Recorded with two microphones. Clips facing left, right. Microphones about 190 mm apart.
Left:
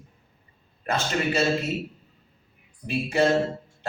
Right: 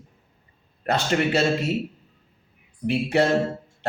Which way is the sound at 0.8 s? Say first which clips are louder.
Right 3 dB; 70° right (ahead or behind).